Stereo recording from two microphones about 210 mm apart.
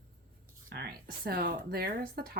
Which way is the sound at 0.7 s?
50° right (ahead or behind).